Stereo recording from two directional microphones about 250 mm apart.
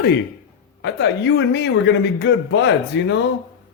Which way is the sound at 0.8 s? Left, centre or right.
Left.